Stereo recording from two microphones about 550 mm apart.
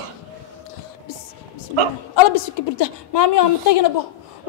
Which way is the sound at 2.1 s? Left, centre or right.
Left.